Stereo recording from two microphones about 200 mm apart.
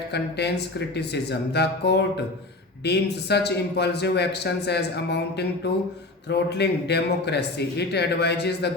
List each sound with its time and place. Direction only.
0.1 s a man's voice: 55° left (ahead or behind)